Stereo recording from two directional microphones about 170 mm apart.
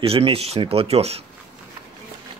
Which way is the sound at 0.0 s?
35° right (ahead or behind).